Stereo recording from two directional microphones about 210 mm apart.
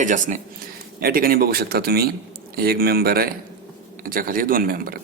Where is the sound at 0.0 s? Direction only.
35° right (ahead or behind).